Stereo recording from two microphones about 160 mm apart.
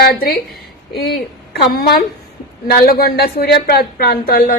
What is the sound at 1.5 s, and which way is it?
A woman's voice, 75° left (ahead or behind).